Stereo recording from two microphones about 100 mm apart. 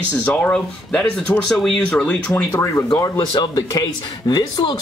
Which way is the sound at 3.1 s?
55° left (ahead or behind).